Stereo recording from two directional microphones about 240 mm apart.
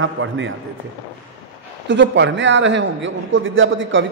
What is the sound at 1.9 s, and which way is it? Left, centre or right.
A man's voice, right.